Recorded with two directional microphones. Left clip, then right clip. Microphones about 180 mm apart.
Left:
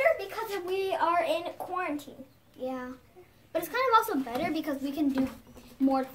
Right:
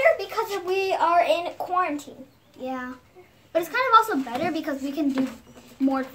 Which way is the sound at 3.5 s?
20° left (ahead or behind).